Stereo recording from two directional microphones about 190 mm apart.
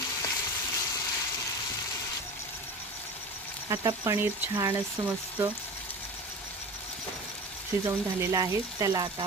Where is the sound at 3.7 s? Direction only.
15° right (ahead or behind).